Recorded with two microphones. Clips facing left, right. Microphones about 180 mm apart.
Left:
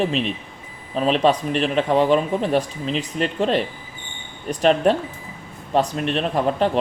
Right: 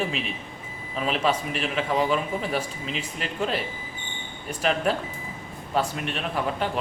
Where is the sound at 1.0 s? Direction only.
35° left (ahead or behind).